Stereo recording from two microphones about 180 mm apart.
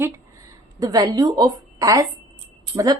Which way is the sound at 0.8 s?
20° right (ahead or behind).